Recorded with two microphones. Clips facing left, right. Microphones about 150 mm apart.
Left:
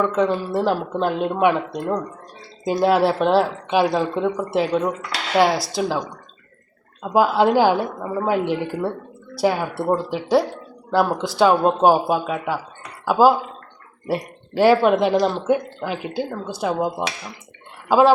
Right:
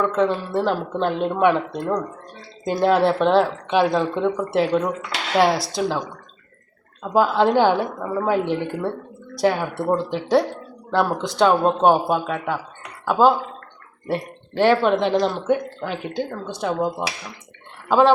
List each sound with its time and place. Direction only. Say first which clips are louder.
0.1 s speech: even; centre (ahead or behind)
7.0 s speech: left 1 dB; 10° left (ahead or behind)